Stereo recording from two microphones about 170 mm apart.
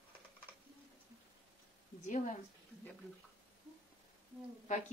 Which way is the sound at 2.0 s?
45° left (ahead or behind).